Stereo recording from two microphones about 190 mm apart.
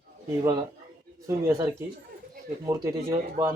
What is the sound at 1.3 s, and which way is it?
Speech, 15° right (ahead or behind).